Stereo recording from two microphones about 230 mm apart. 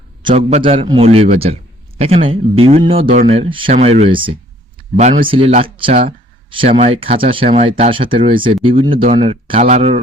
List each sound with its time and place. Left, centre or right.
0.3 s speech: right